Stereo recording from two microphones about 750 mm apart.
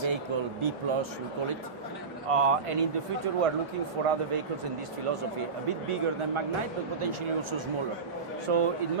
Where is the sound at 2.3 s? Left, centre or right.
Right.